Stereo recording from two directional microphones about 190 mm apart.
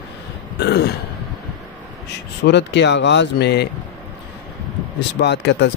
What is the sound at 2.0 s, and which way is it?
Speech, 65° left (ahead or behind).